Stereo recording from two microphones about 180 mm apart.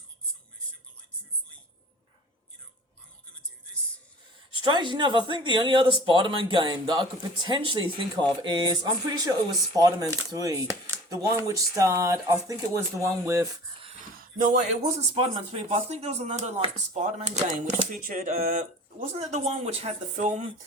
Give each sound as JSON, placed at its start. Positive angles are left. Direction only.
{"t": 4.5, "sound": "speech", "side_deg": -25}
{"t": 15.1, "sound": "speech", "side_deg": -30}